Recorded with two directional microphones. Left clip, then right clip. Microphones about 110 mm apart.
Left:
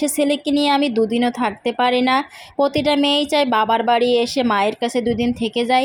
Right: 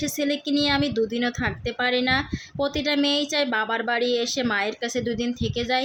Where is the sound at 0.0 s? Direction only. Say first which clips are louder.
Left 7 dB; 45° left (ahead or behind).